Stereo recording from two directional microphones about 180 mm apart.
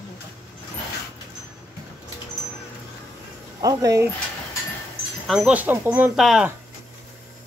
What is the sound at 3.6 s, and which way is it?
Speech, 20° right (ahead or behind).